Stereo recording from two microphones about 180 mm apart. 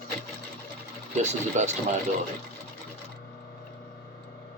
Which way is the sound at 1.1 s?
40° right (ahead or behind).